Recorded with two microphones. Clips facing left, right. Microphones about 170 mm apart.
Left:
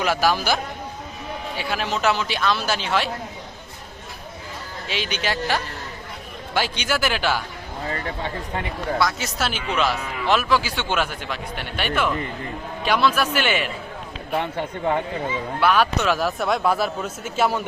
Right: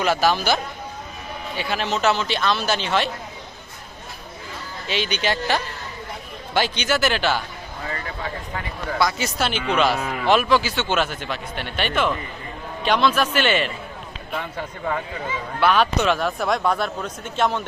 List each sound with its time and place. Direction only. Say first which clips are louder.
0.0 s a man's voice: right 1 dB; 10° left (ahead or behind)
4.9 s a man's voice: right 3 dB; 5° left (ahead or behind)
7.9 s speech: left 2 dB; 30° left (ahead or behind)
9.0 s a man's voice: right 3 dB; centre (ahead or behind)
15.6 s speech: right 1 dB; 10° left (ahead or behind)